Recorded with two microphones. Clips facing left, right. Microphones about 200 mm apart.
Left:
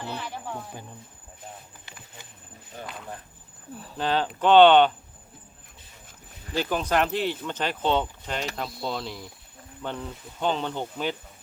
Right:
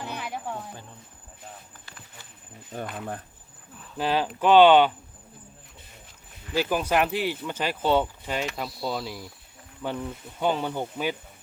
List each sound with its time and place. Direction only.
0.0 s speech: 15° right (ahead or behind)
1.8 s snake: 20° left (ahead or behind)
2.7 s speech: 55° right (ahead or behind)
3.9 s speech: 10° right (ahead or behind)
6.6 s speech: 10° right (ahead or behind)